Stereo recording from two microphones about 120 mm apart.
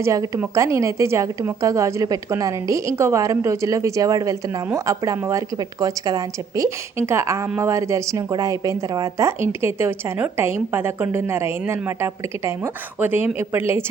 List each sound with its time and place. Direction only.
0.0 s a woman's voice: 25° right (ahead or behind)